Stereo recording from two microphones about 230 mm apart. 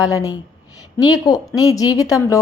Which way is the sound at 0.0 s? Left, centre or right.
Centre.